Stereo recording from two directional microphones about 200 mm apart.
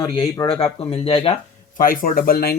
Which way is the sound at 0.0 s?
20° left (ahead or behind).